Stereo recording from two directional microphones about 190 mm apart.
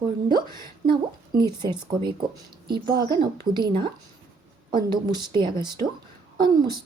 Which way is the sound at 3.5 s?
25° right (ahead or behind).